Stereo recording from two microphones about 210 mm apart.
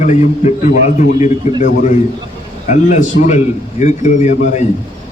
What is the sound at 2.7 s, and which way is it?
A man's voice, 35° left (ahead or behind).